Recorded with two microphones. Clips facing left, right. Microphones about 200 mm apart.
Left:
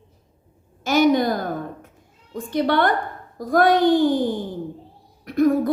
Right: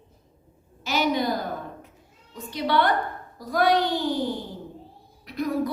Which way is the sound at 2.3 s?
50° left (ahead or behind).